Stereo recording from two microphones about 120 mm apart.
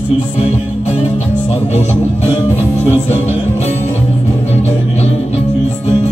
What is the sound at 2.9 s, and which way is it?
Music, 65° left (ahead or behind).